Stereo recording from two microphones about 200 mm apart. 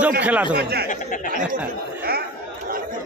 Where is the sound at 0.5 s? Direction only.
50° right (ahead or behind).